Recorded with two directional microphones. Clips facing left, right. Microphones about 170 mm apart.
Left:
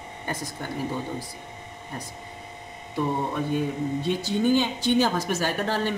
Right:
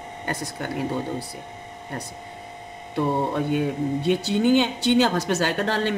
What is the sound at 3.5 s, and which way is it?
Speech, 70° right (ahead or behind).